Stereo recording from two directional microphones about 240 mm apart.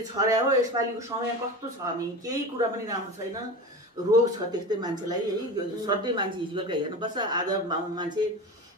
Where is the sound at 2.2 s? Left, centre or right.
Centre.